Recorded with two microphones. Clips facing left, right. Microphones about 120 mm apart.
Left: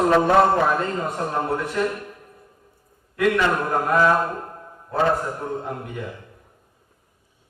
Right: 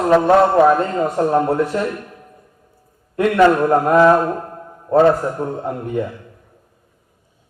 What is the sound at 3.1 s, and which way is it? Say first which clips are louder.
Speech: right 7 dB; 35° right (ahead or behind).